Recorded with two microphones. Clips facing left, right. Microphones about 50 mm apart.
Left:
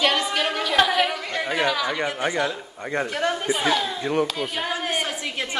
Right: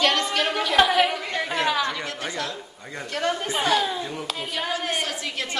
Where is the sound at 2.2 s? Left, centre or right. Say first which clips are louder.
Left 7 dB; left.